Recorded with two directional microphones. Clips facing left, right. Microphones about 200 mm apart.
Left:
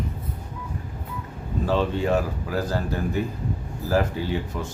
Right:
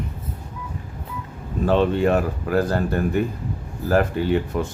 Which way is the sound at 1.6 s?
60° right (ahead or behind).